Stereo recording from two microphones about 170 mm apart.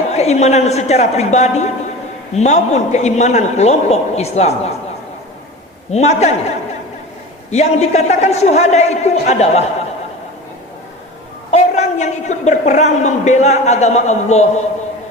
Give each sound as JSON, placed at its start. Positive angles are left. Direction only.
{"t": 0.1, "sound": "a man's voice", "side_deg": 40}
{"t": 5.9, "sound": "a man's voice", "side_deg": 40}
{"t": 7.5, "sound": "a man's voice", "side_deg": 40}
{"t": 11.5, "sound": "a woman's voice", "side_deg": 40}